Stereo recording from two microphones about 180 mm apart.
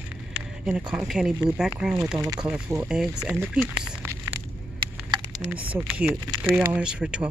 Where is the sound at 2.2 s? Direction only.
20° right (ahead or behind).